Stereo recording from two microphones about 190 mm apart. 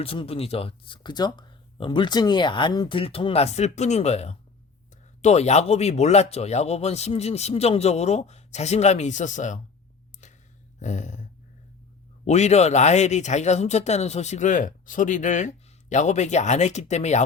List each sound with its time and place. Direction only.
0.0 s speech: 30° left (ahead or behind)
10.8 s a sound: 40° left (ahead or behind)
12.2 s speech: 35° left (ahead or behind)